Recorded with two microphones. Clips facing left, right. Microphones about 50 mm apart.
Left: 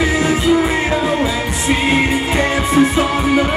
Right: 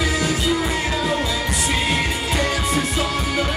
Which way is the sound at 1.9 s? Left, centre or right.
Left.